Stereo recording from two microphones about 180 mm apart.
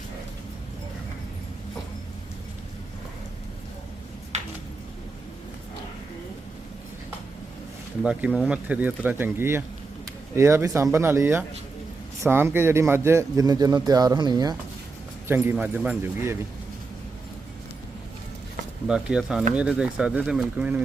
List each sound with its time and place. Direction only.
8.0 s speech: 5° right (ahead or behind); by 14.5 s 25° right (ahead or behind)
15.3 s speech: 10° right (ahead or behind)
18.9 s speech: 5° right (ahead or behind)